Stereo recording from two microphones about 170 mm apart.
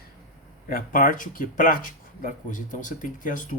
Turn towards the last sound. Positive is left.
turn(degrees=50)  # may be behind; listen again after turning